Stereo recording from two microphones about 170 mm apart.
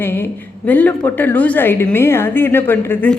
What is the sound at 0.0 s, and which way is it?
A woman's voice, 15° left (ahead or behind).